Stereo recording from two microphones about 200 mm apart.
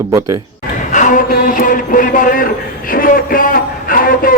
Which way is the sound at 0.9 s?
40° left (ahead or behind).